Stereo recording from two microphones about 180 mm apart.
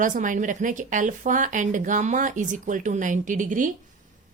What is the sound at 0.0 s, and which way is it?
Speech, 45° right (ahead or behind).